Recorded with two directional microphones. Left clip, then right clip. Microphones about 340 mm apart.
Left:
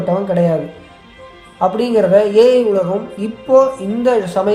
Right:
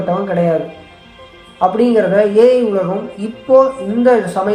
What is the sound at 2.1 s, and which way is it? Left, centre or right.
Speech, centre.